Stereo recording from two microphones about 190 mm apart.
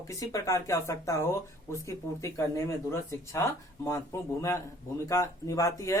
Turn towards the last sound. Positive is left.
turn(degrees=15)  # may be behind; listen again after turning